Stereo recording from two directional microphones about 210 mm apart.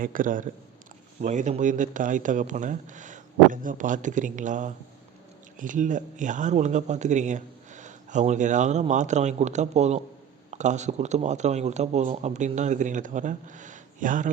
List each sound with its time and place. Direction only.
0.0 s speech: 40° right (ahead or behind)